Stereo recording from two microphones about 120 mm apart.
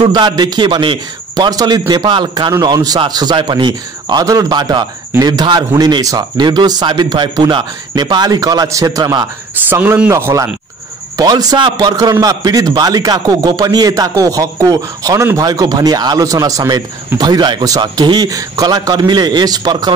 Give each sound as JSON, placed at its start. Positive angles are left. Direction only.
{"t": 0.0, "sound": "a man's voice", "side_deg": -40}
{"t": 9.7, "sound": "a man's voice", "side_deg": -15}